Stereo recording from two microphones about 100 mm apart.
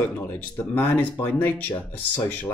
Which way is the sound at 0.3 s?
20° left (ahead or behind).